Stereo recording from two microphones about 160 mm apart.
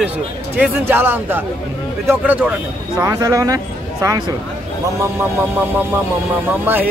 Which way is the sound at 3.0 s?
20° right (ahead or behind).